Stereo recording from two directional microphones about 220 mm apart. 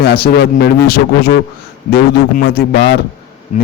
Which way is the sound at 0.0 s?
45° left (ahead or behind).